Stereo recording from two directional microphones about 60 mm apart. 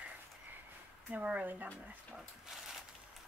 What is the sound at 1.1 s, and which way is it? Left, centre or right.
Speech, right.